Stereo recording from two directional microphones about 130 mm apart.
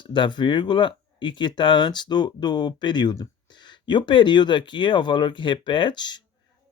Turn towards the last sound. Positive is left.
turn(degrees=35)  # may be behind; listen again after turning